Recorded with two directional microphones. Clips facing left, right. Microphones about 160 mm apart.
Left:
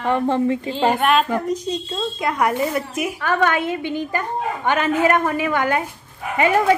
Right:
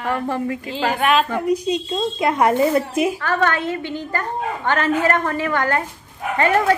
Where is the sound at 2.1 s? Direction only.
25° right (ahead or behind).